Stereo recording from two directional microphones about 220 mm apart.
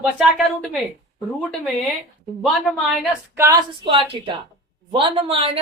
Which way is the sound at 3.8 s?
25° right (ahead or behind).